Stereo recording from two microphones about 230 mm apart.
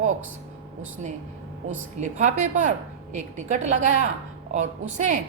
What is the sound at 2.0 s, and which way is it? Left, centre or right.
A woman's voice, right.